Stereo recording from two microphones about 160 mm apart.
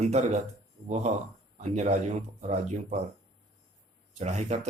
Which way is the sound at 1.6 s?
45° right (ahead or behind).